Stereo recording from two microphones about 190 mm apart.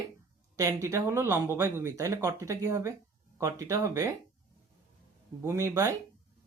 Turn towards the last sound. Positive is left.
turn(degrees=-15)  # may be behind; listen again after turning